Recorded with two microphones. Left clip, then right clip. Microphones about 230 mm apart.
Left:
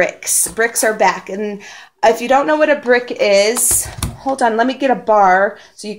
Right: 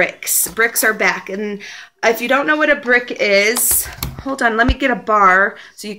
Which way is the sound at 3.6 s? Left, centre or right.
Left.